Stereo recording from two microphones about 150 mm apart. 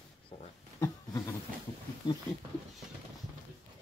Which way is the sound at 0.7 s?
20° left (ahead or behind).